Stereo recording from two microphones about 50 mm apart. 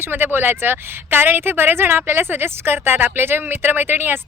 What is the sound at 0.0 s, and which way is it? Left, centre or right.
A woman's voice, right.